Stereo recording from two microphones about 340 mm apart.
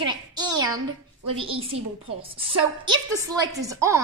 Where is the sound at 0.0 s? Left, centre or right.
Centre.